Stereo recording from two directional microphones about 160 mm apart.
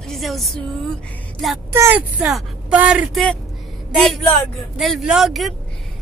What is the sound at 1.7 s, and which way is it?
Speech, 15° right (ahead or behind).